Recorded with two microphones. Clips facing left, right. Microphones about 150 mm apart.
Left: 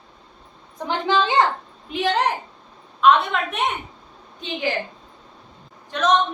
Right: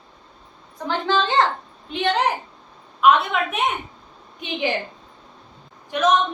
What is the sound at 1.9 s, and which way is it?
A woman's voice, centre (ahead or behind).